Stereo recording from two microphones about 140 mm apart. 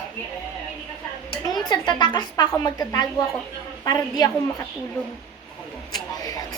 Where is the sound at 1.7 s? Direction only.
30° left (ahead or behind).